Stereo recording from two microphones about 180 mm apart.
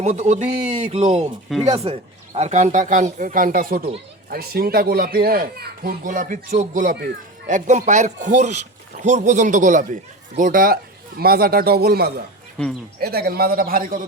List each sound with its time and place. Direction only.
0.0 s a child's voice: 40° right (ahead or behind)